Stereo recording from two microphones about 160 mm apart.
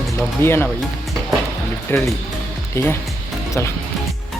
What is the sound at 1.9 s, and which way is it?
Speech, 15° left (ahead or behind).